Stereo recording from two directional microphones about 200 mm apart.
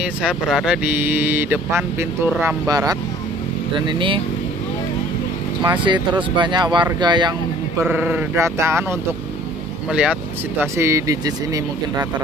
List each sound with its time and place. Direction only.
0.0 s speech: 5° right (ahead or behind); by 4.2 s 25° right (ahead or behind)
5.6 s speech: 20° right (ahead or behind)
7.8 s speech: 10° right (ahead or behind)
9.8 s speech: 5° right (ahead or behind)